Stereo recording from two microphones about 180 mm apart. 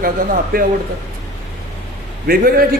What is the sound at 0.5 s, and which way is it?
Speech, 55° right (ahead or behind).